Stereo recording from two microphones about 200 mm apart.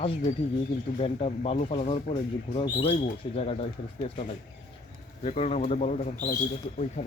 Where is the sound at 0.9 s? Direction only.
30° left (ahead or behind).